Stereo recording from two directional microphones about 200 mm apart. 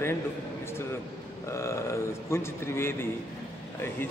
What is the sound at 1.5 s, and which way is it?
A man's voice, 15° left (ahead or behind).